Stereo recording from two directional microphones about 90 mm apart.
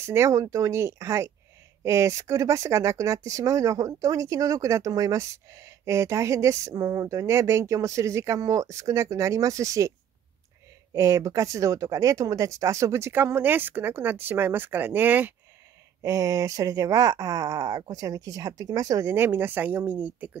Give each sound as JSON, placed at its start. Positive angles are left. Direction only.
{"t": 0.0, "sound": "speech", "side_deg": -30}
{"t": 16.0, "sound": "speech", "side_deg": -35}
{"t": 19.1, "sound": "speech", "side_deg": -25}